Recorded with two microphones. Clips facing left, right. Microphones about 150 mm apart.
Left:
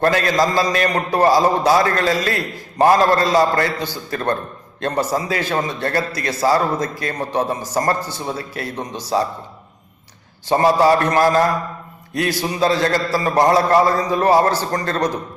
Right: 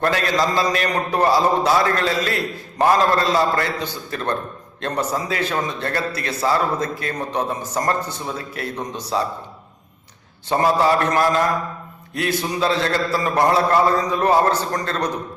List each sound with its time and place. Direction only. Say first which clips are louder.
0.0 s a man's voice: left 3 dB; 40° left (ahead or behind)
10.6 s a man's voice: left 3 dB; 40° left (ahead or behind)